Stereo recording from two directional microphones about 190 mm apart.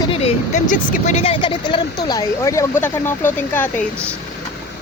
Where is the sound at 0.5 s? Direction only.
40° left (ahead or behind).